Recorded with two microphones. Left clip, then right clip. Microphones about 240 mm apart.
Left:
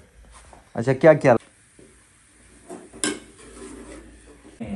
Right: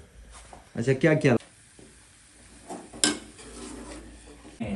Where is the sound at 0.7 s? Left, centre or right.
Centre.